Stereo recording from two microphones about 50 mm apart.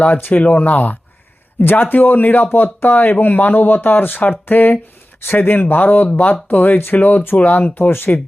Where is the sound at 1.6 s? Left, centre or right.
Left.